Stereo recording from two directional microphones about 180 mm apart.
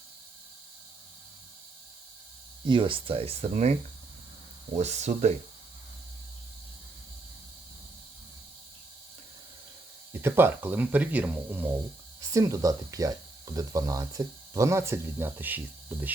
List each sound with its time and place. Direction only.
2.6 s speech: 25° right (ahead or behind)
4.8 s speech: 40° right (ahead or behind)
10.1 s speech: 15° right (ahead or behind)